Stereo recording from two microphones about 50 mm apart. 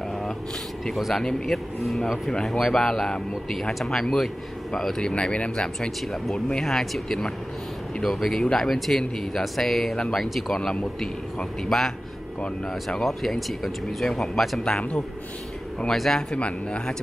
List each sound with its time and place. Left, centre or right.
0.9 s a man's voice: centre
5.1 s speech: left
5.8 s a man's voice: centre
13.0 s speech: centre
14.6 s speech: left
15.9 s a man's voice: centre
16.3 s speech: left